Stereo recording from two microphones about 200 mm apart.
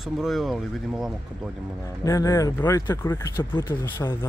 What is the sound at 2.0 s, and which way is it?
Speech, 15° left (ahead or behind).